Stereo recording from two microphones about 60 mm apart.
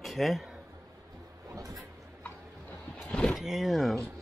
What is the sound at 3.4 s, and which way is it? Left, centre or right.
Speech, centre.